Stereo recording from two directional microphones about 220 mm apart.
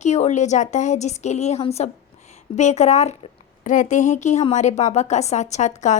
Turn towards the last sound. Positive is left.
turn(degrees=35)  # may be behind; listen again after turning